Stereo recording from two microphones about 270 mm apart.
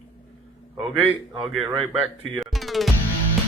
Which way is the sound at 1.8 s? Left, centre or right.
Centre.